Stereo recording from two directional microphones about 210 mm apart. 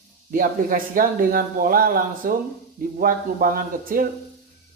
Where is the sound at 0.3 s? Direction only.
40° right (ahead or behind).